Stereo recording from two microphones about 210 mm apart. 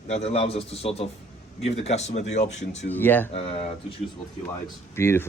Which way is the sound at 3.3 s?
30° left (ahead or behind).